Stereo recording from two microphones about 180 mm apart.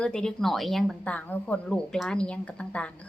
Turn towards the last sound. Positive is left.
turn(degrees=5)  # may be behind; listen again after turning